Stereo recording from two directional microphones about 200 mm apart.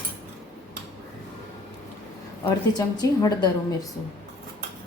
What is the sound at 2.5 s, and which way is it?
Speech, 20° left (ahead or behind).